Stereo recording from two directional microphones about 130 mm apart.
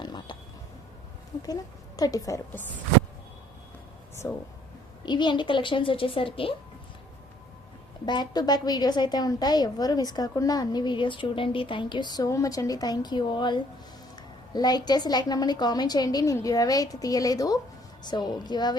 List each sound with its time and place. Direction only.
0.0 s a sound: 35° left (ahead or behind)
2.0 s a woman's voice: 25° left (ahead or behind)
5.0 s a woman's voice: 35° left (ahead or behind)
8.0 s a woman's voice: 35° left (ahead or behind)